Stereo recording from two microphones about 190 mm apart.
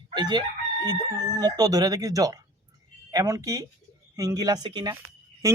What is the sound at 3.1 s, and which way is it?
Speech, 15° right (ahead or behind).